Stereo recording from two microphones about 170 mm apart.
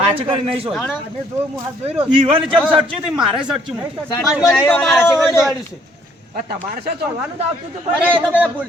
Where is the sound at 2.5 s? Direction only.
10° left (ahead or behind).